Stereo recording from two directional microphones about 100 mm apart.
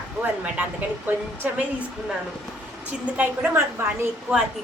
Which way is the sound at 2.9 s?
15° right (ahead or behind).